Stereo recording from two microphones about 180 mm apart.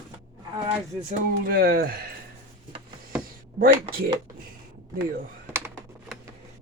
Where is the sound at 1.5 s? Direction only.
55° right (ahead or behind).